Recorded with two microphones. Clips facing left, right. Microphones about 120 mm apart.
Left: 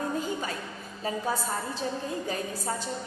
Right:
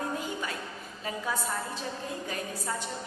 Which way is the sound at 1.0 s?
35° left (ahead or behind).